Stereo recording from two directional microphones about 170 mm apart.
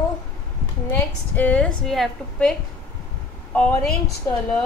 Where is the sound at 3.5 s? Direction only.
5° left (ahead or behind).